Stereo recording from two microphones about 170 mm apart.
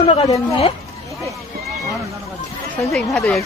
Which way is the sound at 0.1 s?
35° left (ahead or behind).